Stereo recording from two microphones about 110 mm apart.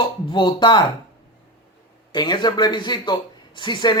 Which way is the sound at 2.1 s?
40° left (ahead or behind).